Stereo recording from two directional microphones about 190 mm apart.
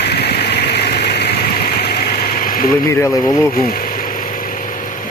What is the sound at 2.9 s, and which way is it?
Speech, 15° left (ahead or behind).